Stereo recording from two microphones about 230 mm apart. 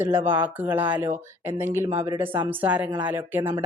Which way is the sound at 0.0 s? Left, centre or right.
Centre.